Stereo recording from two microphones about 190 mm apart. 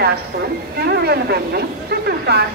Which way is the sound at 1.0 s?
55° right (ahead or behind).